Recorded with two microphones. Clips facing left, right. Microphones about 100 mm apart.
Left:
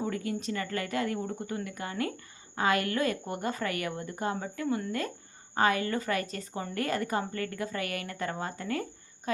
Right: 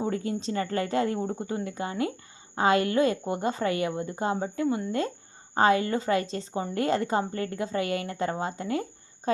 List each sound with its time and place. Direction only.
0.0 s a woman's voice: 25° right (ahead or behind)